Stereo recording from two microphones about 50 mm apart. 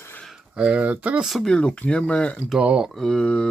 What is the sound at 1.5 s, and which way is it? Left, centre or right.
Speech, left.